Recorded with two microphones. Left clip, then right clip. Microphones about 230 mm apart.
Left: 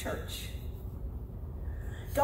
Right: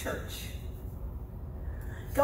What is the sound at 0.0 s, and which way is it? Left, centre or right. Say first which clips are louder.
Speech: right 1 dB; left.